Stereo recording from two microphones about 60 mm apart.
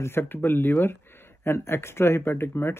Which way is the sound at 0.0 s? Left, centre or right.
Left.